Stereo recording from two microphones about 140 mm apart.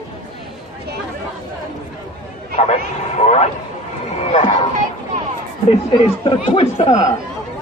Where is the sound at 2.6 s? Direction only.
55° left (ahead or behind).